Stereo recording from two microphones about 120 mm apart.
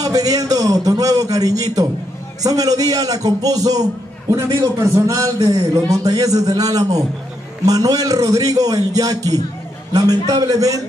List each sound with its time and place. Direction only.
0.0 s a man's voice: 30° right (ahead or behind)